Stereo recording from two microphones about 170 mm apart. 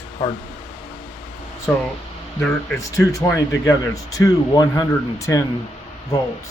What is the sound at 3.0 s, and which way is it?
A man's voice, 20° left (ahead or behind).